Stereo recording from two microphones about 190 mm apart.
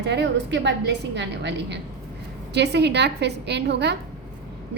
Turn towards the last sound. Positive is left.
turn(degrees=-60)  # may be behind; listen again after turning